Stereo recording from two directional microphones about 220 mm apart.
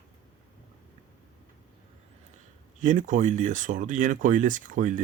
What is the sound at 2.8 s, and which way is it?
Speech, 35° right (ahead or behind).